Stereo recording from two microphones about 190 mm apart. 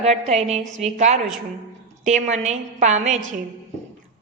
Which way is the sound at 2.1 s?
40° right (ahead or behind).